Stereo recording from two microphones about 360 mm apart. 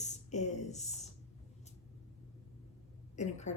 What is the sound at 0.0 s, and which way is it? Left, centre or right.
Speech, centre.